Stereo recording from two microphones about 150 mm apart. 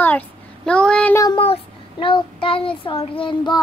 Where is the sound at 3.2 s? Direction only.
35° left (ahead or behind).